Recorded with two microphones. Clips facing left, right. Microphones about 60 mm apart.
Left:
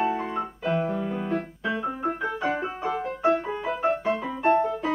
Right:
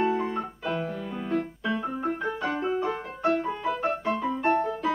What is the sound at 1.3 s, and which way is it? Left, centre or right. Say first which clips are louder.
Keyboard: right 5 dB; centre.